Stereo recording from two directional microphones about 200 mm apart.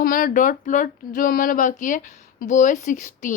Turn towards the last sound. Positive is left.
turn(degrees=40)  # may be behind; listen again after turning